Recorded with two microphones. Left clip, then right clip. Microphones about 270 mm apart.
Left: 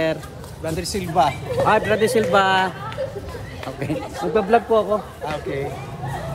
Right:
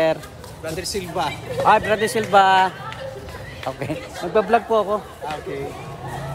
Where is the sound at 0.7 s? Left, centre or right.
Left.